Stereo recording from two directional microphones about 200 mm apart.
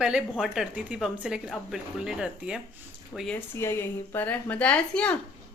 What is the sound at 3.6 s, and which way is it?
A woman's voice, 15° left (ahead or behind).